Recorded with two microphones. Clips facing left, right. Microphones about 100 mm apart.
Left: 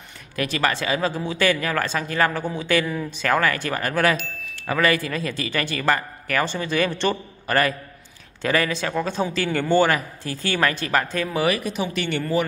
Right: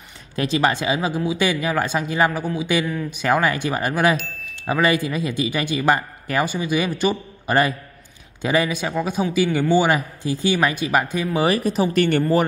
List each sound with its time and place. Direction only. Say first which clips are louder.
0.4 s a man's voice: right 3 dB; 20° right (ahead or behind)
4.2 s chime: even; centre (ahead or behind)
4.6 s a man's voice: right 2 dB; 20° right (ahead or behind)
11.4 s speech: right 6 dB; 35° right (ahead or behind)